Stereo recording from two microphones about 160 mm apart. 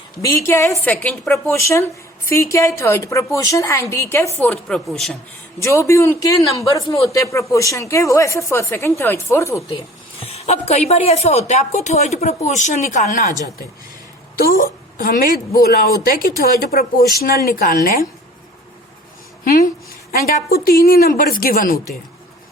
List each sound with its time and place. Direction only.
0.2 s a woman's voice: 20° left (ahead or behind); by 5.1 s centre (ahead or behind)
5.6 s speech: 20° left (ahead or behind)
10.2 s a woman's voice: 40° left (ahead or behind)
14.3 s a woman's voice: 65° left (ahead or behind)
20.1 s a woman's voice: 70° left (ahead or behind)